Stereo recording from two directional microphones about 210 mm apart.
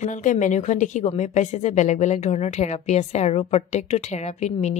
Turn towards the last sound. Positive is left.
turn(degrees=30)  # may be behind; listen again after turning